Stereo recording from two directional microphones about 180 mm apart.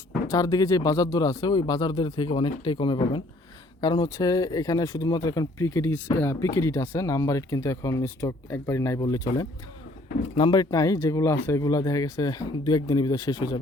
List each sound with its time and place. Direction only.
0.3 s speech: 20° left (ahead or behind)